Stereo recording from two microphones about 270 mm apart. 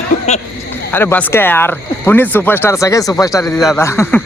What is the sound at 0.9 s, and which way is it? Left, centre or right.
Speech, centre.